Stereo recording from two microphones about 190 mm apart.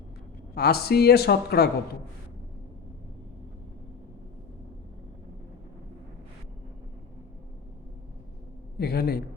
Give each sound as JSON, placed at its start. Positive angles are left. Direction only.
{"t": 0.5, "sound": "speech", "side_deg": 55}
{"t": 8.8, "sound": "speech", "side_deg": 55}